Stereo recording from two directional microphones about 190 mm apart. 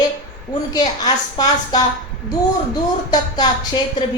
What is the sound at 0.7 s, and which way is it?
A woman's voice, 20° left (ahead or behind).